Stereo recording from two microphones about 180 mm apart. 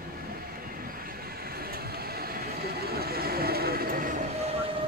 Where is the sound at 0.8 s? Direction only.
55° right (ahead or behind).